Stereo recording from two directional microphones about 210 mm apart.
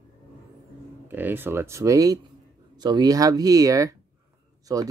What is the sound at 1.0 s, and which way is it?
Speech, 10° right (ahead or behind).